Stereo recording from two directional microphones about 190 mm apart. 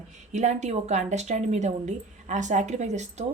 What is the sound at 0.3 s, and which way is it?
Speech, 40° right (ahead or behind).